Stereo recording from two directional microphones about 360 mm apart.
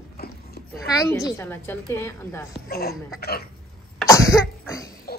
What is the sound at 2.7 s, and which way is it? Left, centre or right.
Speech, left.